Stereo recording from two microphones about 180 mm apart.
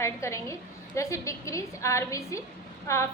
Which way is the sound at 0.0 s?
15° left (ahead or behind).